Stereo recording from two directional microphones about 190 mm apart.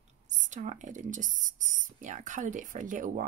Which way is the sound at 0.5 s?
40° right (ahead or behind).